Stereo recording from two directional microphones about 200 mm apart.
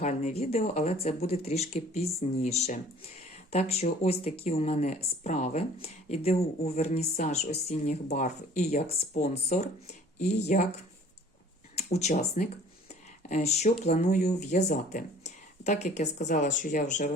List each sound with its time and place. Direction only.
0.0 s speech: 35° left (ahead or behind)
11.7 s speech: 35° left (ahead or behind)